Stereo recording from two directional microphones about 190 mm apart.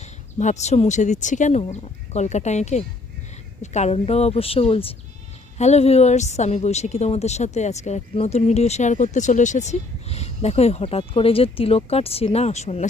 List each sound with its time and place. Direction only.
0.0 s a woman's voice: 35° left (ahead or behind)